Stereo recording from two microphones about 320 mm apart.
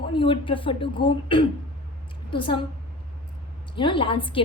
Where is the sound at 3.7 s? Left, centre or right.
Centre.